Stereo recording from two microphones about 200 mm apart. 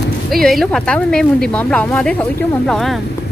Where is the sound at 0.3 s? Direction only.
Centre (ahead or behind).